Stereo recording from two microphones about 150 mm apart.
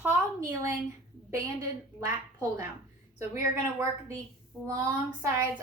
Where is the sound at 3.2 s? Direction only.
20° right (ahead or behind).